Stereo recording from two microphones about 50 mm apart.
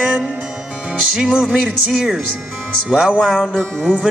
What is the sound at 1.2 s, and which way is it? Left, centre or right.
Speech, centre.